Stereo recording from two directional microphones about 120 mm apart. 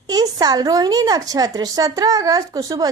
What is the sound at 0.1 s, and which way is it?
Speech, 35° right (ahead or behind).